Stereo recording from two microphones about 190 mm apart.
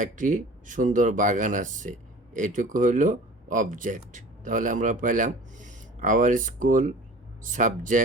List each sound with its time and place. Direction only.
0.0 s speech: 40° right (ahead or behind)